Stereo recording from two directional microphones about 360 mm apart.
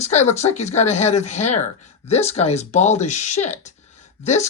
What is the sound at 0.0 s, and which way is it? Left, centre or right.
Speech, centre.